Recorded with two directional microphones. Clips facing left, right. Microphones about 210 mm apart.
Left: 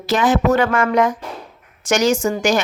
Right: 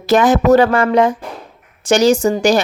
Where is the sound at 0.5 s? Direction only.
35° right (ahead or behind).